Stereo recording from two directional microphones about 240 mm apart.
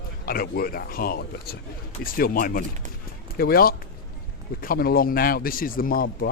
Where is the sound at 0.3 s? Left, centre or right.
Left.